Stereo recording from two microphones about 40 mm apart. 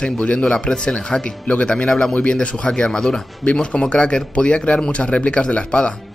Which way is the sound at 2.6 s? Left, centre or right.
Left.